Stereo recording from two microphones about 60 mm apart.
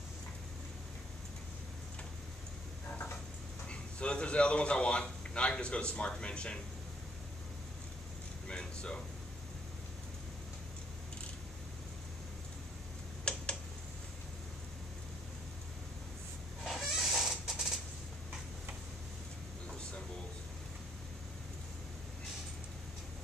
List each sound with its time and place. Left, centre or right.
3.6 s a man's voice: centre
8.5 s speech: centre
13.3 s tick-tock: centre
16.6 s creak: centre